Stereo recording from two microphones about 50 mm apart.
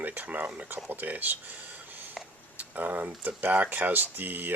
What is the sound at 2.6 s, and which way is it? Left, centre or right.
Speech, right.